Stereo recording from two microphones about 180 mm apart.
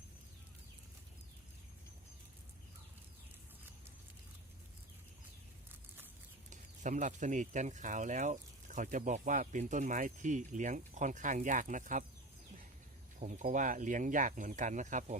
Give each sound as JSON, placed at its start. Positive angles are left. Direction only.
{"t": 6.5, "sound": "speech", "side_deg": -45}
{"t": 13.1, "sound": "speech", "side_deg": -45}